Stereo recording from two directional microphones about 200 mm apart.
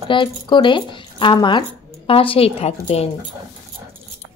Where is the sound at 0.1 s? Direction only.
25° left (ahead or behind).